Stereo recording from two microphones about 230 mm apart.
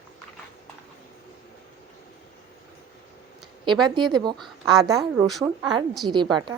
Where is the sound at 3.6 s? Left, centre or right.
Centre.